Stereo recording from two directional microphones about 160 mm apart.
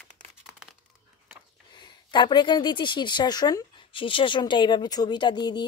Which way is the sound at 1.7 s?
25° left (ahead or behind).